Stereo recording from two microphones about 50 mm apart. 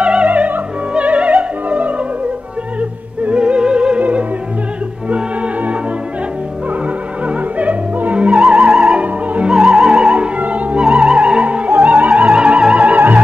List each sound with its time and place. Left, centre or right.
0.0 s music: right
3.3 s music: right
5.1 s music: right
7.2 s music: right
9.0 s music: right
9.5 s music: centre
10.1 s opera: right
10.8 s music: centre